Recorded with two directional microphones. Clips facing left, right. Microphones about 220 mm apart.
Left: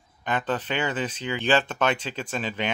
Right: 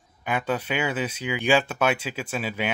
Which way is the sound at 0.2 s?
10° right (ahead or behind).